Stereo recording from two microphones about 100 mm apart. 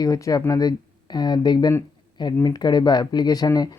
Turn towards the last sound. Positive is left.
turn(degrees=40)  # may be behind; listen again after turning